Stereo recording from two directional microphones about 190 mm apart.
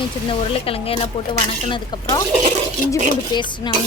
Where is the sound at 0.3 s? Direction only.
30° left (ahead or behind).